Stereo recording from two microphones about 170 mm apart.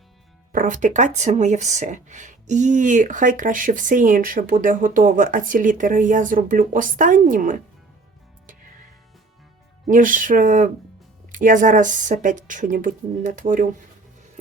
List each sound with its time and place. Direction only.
0.5 s speech: 50° right (ahead or behind)
9.8 s speech: 50° right (ahead or behind)